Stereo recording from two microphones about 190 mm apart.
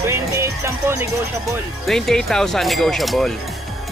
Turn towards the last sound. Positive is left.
turn(degrees=0)  # may be behind; listen again after turning